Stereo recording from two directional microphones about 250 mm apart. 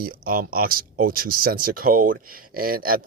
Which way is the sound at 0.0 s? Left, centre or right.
Right.